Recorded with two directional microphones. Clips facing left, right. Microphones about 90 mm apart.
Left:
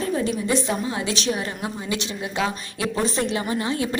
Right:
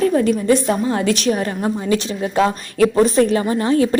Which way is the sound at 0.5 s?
50° right (ahead or behind).